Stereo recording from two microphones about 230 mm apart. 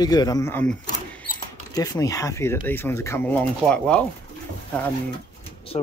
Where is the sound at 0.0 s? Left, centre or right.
Centre.